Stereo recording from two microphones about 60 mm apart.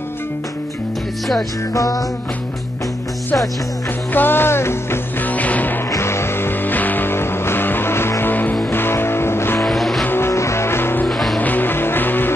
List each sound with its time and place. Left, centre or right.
1.7 s music: left
4.1 s music: left
5.2 s music: left
5.9 s music: left
6.6 s music: left
9.6 s music: centre
10.0 s music: left
11.1 s music: centre
11.3 s music: left